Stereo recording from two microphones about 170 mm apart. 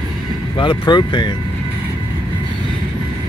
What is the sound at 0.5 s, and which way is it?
Speech, 30° left (ahead or behind).